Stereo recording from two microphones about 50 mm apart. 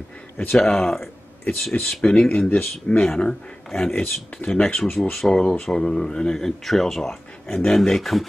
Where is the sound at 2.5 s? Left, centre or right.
Left.